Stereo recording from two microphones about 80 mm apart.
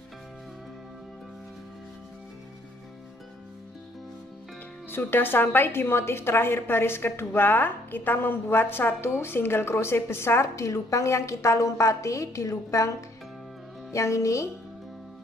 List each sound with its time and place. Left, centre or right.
4.9 s a woman's voice: left
13.9 s a woman's voice: left